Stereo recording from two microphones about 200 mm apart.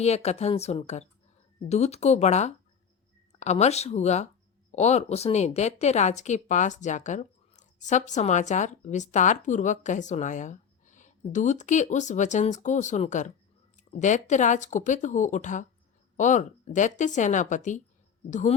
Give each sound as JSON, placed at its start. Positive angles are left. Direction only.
{"t": 0.0, "sound": "speech", "side_deg": 35}